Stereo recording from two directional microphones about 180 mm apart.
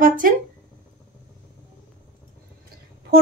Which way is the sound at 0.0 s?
50° right (ahead or behind).